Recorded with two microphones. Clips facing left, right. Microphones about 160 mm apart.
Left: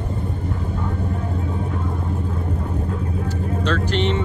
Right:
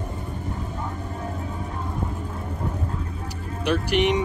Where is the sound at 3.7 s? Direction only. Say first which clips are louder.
Right 2 dB; 15° right (ahead or behind).